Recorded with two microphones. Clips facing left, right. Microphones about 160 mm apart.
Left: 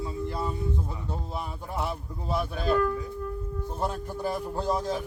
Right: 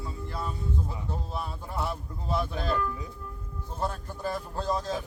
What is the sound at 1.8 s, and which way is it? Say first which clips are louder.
A man's voice: left 1 dB; 15° left (ahead or behind).